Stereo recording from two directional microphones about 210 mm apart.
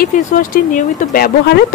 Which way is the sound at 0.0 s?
40° left (ahead or behind).